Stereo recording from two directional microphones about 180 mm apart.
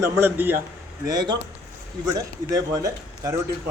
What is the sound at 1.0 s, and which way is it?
Speech, 20° right (ahead or behind).